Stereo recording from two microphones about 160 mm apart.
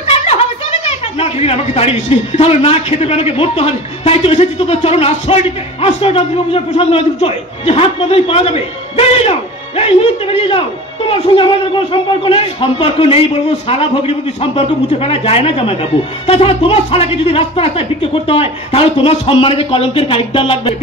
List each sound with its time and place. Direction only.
0.0 s speech: 40° left (ahead or behind)